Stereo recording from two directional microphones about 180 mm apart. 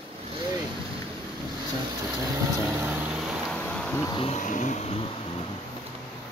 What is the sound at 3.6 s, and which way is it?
Bee, 5° left (ahead or behind).